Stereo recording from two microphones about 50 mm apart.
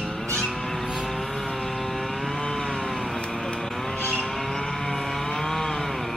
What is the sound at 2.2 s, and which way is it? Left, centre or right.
Chainsaw, centre.